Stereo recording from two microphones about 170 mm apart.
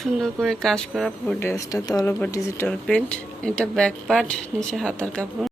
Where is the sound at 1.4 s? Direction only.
15° left (ahead or behind).